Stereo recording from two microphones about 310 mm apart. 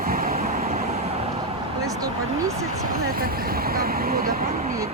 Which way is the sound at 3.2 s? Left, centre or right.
Right.